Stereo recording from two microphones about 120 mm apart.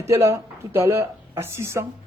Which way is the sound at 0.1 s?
25° right (ahead or behind).